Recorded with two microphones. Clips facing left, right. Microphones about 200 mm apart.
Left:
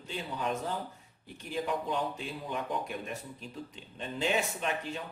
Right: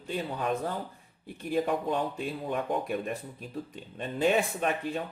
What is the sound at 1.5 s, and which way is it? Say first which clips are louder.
Speech: right 5 dB; 55° right (ahead or behind).